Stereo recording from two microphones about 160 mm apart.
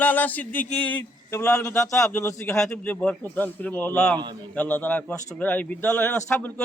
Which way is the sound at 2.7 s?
5° left (ahead or behind).